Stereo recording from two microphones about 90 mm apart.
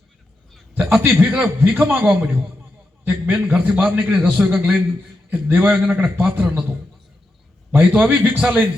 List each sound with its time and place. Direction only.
0.7 s a man's voice: 25° right (ahead or behind)
3.4 s a man's voice: 5° right (ahead or behind)
3.9 s a man's voice: 20° right (ahead or behind)